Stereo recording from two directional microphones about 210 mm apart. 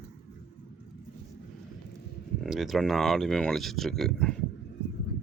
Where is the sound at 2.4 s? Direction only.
Centre (ahead or behind).